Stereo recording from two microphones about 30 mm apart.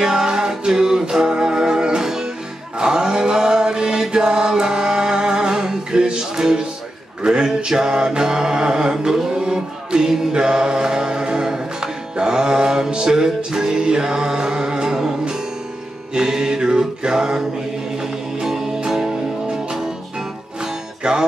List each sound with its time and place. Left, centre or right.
0.0 s music: right
2.8 s chant: right
7.2 s mantra: right
10.3 s music: right
16.2 s mantra: right
18.5 s music: centre
21.0 s music: right